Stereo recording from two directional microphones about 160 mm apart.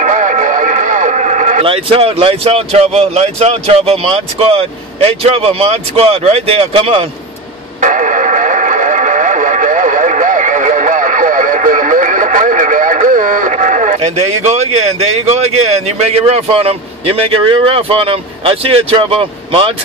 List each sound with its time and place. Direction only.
0.0 s radio: 50° right (ahead or behind)
1.6 s speech: 35° right (ahead or behind)
7.8 s radio: 50° right (ahead or behind); by 19.7 s 35° right (ahead or behind)